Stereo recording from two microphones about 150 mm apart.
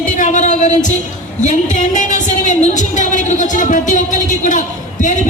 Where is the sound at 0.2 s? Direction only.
55° left (ahead or behind).